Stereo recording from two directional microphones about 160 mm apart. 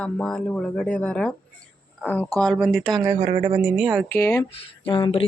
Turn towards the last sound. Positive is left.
turn(degrees=35)  # may be behind; listen again after turning